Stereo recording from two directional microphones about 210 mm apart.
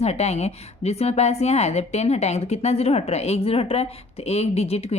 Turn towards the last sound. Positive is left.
turn(degrees=30)  # may be behind; listen again after turning